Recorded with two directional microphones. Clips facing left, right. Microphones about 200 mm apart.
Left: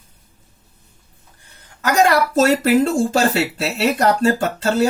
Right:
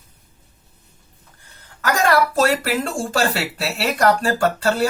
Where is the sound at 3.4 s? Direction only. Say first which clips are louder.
Left 4 dB; 20° left (ahead or behind).